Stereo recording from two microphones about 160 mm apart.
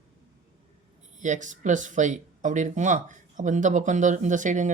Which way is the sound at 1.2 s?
50° right (ahead or behind).